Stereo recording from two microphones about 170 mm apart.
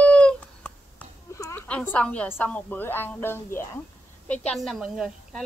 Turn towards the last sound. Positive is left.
turn(degrees=0)  # may be behind; listen again after turning